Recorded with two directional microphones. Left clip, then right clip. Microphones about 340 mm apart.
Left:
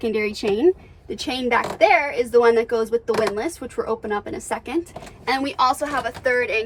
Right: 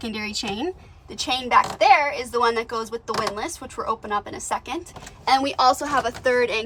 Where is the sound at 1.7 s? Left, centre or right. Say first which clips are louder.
Even; right.